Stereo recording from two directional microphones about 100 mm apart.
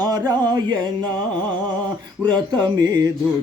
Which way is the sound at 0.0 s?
45° right (ahead or behind).